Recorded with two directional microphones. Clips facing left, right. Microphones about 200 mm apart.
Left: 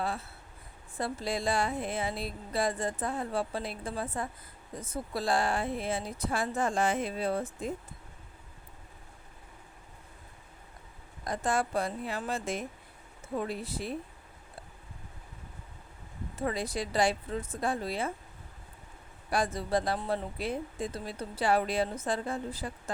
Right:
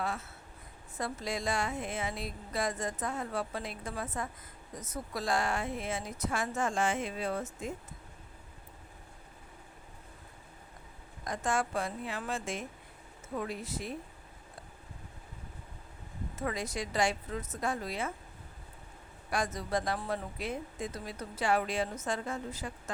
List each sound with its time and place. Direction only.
0.0 s a woman's voice: 30° left (ahead or behind)
11.2 s a woman's voice: 35° left (ahead or behind)
16.3 s a woman's voice: 30° left (ahead or behind)
19.3 s a woman's voice: 30° left (ahead or behind)